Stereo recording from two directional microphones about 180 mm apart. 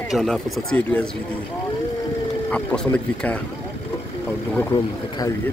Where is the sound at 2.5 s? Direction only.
5° left (ahead or behind).